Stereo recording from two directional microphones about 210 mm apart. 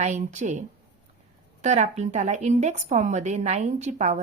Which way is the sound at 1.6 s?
35° right (ahead or behind).